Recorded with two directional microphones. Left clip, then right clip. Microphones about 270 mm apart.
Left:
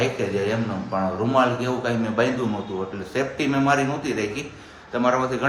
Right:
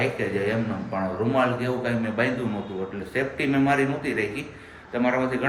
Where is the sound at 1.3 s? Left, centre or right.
Centre.